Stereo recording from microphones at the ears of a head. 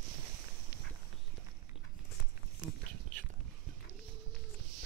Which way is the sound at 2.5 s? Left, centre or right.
Right.